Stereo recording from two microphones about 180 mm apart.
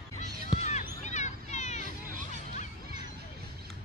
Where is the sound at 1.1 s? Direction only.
40° left (ahead or behind).